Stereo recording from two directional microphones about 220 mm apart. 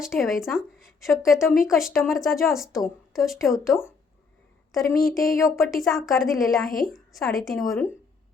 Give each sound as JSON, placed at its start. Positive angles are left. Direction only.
{"t": 0.0, "sound": "a woman's voice", "side_deg": 0}